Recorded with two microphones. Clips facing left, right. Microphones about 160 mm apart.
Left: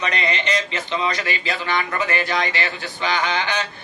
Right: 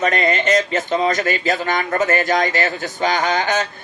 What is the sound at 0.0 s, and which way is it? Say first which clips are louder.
Speech: right 6 dB; 45° right (ahead or behind).